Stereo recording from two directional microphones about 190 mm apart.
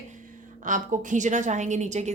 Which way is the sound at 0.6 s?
40° right (ahead or behind).